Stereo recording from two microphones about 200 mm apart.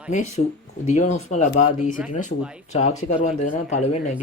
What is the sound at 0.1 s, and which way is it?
Speech, 35° left (ahead or behind).